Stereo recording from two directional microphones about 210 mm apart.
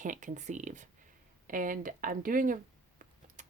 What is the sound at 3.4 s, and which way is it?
Typing, 35° right (ahead or behind).